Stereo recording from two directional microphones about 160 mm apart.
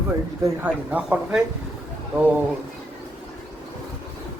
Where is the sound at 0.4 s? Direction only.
10° right (ahead or behind).